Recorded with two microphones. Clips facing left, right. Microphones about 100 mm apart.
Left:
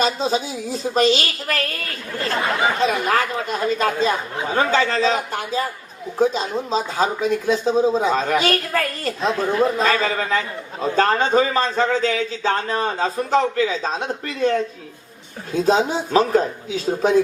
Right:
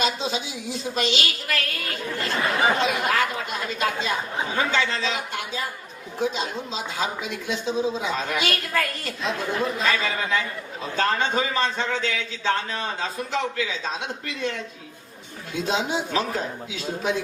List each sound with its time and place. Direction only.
0.0 s speech: 40° left (ahead or behind)
2.8 s speech: 40° left (ahead or behind)